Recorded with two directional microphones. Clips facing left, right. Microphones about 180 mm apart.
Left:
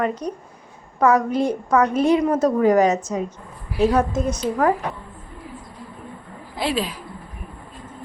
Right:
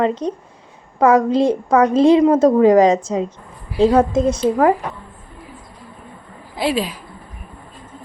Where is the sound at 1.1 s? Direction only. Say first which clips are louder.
Right 7 dB; 90° right.